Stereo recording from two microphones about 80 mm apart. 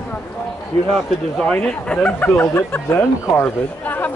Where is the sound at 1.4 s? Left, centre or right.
Centre.